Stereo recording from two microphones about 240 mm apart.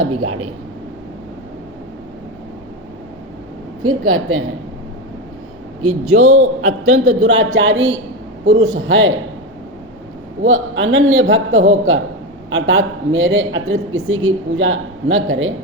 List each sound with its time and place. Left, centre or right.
0.0 s a man's voice: right
3.8 s a man's voice: right
5.8 s a man's voice: right
10.4 s a man's voice: right